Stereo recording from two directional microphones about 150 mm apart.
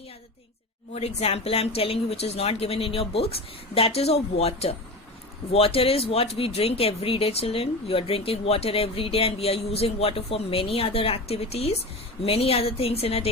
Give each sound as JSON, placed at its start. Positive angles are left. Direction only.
{"t": 0.9, "sound": "speech", "side_deg": 40}